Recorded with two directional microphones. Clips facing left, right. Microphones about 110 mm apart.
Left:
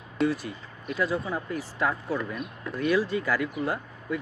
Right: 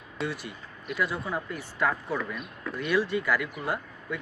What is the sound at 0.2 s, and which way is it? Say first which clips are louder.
Speech: left 7 dB; 35° left (ahead or behind).